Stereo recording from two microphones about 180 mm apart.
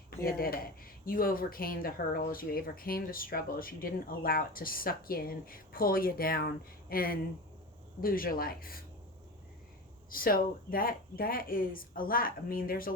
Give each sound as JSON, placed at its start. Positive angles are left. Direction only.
{"t": 0.3, "sound": "speech", "side_deg": 55}
{"t": 10.1, "sound": "speech", "side_deg": 50}